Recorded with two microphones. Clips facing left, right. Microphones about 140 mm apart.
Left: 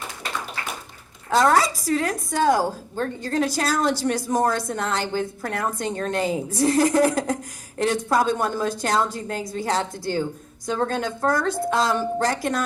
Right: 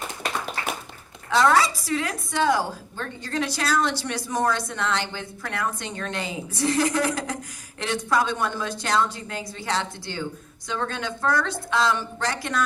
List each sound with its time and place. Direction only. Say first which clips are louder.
1.3 s a woman's voice: left 1 dB; 45° left (ahead or behind)